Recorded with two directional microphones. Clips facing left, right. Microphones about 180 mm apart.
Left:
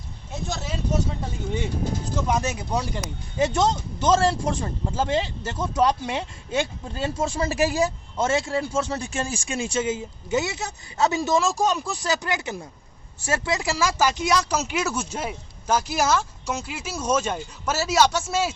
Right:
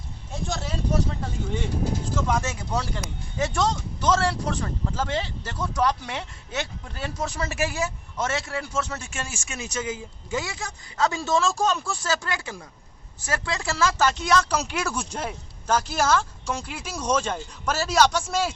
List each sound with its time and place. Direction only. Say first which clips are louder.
0.4 s speech: even; 5° left (ahead or behind)
2.1 s speech: left 3 dB; 20° left (ahead or behind)